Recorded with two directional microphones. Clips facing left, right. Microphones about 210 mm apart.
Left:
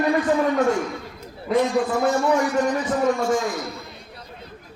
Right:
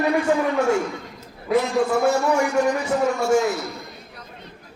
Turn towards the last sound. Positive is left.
turn(degrees=-10)  # may be behind; listen again after turning